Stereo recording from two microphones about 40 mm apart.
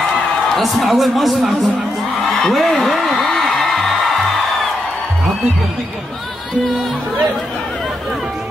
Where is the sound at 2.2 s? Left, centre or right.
Centre.